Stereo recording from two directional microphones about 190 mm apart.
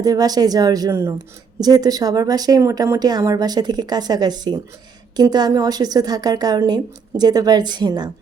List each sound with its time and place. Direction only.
0.0 s speech: 20° right (ahead or behind)